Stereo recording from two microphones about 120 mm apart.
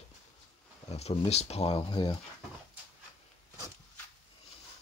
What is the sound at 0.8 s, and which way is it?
Speech, 60° left (ahead or behind).